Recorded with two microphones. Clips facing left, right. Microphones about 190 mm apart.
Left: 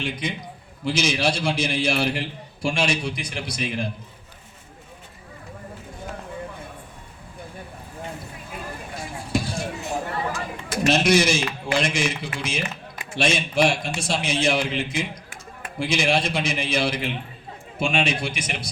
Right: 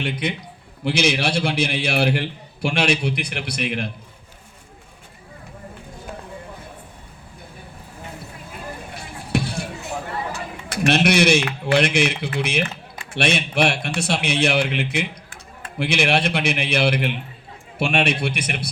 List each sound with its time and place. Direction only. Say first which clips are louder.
0.0 s a man's voice: right 3 dB; 60° right (ahead or behind)
9.0 s vehicle: right 2 dB; 65° right (ahead or behind)
10.7 s a man's voice: right 1 dB; 65° right (ahead or behind)